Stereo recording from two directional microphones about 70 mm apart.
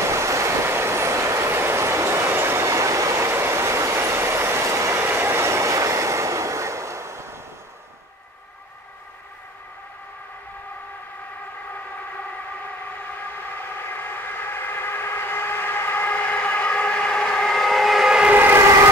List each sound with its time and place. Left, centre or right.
0.1 s train: right
13.1 s siren: left; by 18.3 s centre
18.3 s siren: right